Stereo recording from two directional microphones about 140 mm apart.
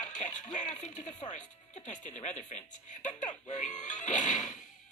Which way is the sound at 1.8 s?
60° left (ahead or behind).